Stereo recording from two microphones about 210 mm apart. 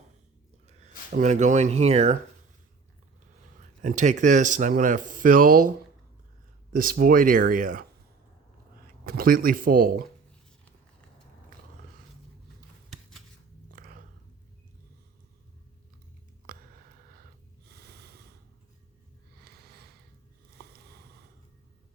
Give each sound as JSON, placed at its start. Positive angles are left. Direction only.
{"t": 1.2, "sound": "speech", "side_deg": -35}
{"t": 3.8, "sound": "speech", "side_deg": -35}
{"t": 6.7, "sound": "speech", "side_deg": -40}
{"t": 9.0, "sound": "speech", "side_deg": -45}
{"t": 12.9, "sound": "scissors", "side_deg": 0}
{"t": 13.7, "sound": "a sound", "side_deg": -40}
{"t": 16.5, "sound": "a sound", "side_deg": -40}
{"t": 17.7, "sound": "snort", "side_deg": -50}
{"t": 19.5, "sound": "a sound", "side_deg": -50}